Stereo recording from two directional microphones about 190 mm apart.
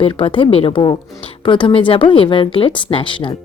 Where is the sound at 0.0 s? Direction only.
25° left (ahead or behind).